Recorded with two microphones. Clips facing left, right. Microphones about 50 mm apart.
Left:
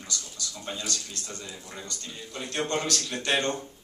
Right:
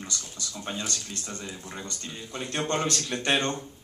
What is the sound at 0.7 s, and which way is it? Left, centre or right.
Speech, right.